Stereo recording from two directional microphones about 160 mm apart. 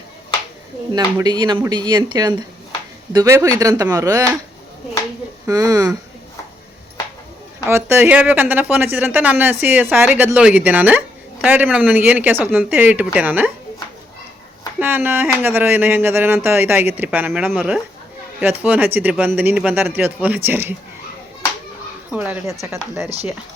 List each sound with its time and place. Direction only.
0.9 s speech: 25° right (ahead or behind)
5.5 s speech: 20° right (ahead or behind)
7.7 s speech: 15° right (ahead or behind)
14.8 s speech: 10° right (ahead or behind)
22.1 s speech: 10° right (ahead or behind)